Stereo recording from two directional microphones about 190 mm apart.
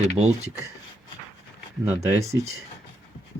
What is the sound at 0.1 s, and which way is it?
Speech, 35° right (ahead or behind).